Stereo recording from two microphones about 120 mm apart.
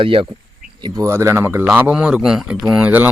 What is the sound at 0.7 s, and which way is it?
Speech, 35° right (ahead or behind).